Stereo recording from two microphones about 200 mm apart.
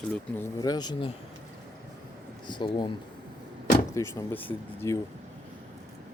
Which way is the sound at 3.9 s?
15° left (ahead or behind).